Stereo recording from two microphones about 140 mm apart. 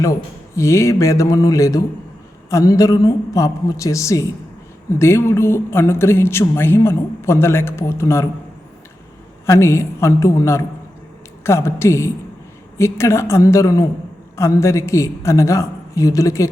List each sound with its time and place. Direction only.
0.0 s a woman's voice: 20° left (ahead or behind)
9.5 s a woman's voice: 20° left (ahead or behind)